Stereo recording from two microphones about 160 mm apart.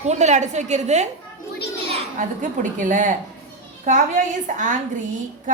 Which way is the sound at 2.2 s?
55° right (ahead or behind).